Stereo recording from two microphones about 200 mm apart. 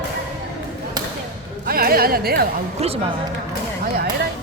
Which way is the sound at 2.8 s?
30° right (ahead or behind).